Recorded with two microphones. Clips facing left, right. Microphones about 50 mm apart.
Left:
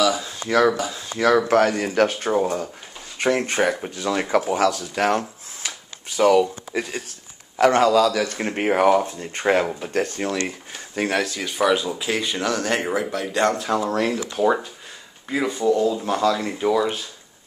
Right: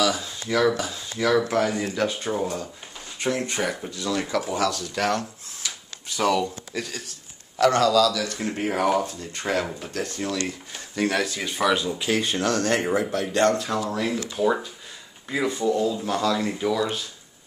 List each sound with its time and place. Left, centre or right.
0.5 s speech: left
1.5 s speech: left
5.6 s a sound: left
6.1 s speech: centre
6.8 s speech: left
11.0 s speech: centre
11.3 s speech: centre
11.6 s speech: centre
12.4 s speech: left
13.1 s speech: left
13.9 s speech: left
15.2 s speech: centre